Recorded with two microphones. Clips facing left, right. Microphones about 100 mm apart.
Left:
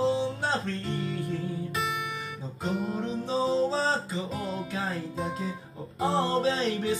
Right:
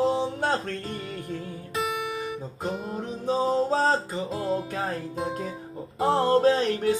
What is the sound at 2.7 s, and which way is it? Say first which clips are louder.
Music: left 2 dB; 20° right (ahead or behind).